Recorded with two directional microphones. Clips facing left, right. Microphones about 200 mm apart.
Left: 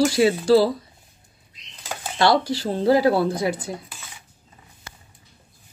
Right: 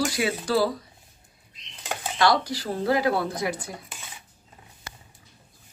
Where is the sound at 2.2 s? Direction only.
30° left (ahead or behind).